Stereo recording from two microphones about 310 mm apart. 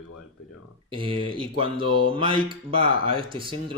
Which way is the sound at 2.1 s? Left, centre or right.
Centre.